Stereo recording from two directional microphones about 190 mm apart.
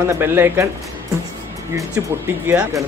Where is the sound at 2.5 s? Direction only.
10° right (ahead or behind).